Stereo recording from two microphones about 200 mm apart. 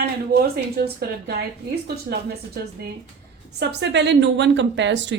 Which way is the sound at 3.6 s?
60° right (ahead or behind).